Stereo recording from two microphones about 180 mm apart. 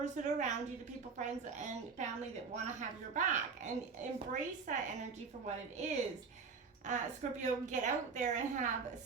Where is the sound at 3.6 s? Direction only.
40° right (ahead or behind).